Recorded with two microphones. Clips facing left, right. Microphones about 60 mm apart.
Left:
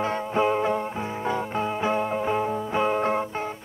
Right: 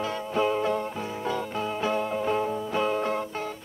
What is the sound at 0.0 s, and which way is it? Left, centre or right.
Music, left.